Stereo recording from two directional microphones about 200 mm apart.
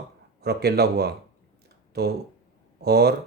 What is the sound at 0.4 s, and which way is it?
Speech, 55° right (ahead or behind).